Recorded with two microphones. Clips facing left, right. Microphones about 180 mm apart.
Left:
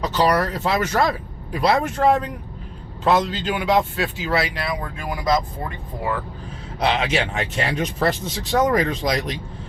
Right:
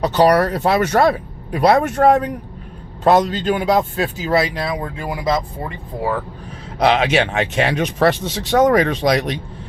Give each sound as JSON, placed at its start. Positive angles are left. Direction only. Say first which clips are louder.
{"t": 0.0, "sound": "speech", "louder": "right 6 dB", "side_deg": -60}
{"t": 4.6, "sound": "speech", "louder": "right 4 dB", "side_deg": -25}
{"t": 6.7, "sound": "speech", "louder": "right 6 dB", "side_deg": -65}